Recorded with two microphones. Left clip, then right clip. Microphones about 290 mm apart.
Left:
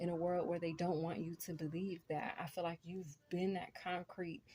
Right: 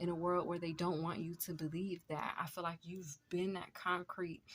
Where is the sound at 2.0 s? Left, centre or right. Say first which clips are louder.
Even; right.